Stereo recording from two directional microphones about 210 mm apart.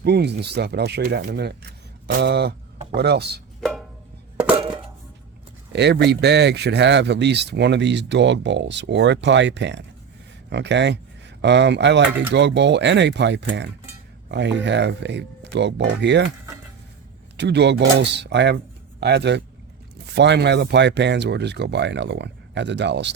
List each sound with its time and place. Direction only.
0.0 s speech: 50° right (ahead or behind)
3.6 s music: centre (ahead or behind)
5.7 s speech: 55° right (ahead or behind)
17.3 s speech: 55° right (ahead or behind)